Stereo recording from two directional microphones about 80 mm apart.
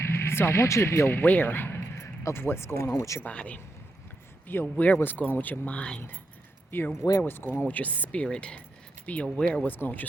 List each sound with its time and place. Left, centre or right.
0.0 s speech: left
3.2 s speech: centre
6.7 s speech: left